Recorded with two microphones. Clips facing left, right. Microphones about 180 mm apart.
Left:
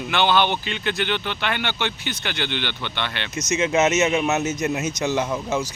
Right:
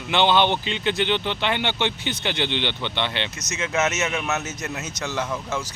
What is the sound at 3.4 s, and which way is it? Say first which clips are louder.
Speech: left 6 dB; 15° left (ahead or behind).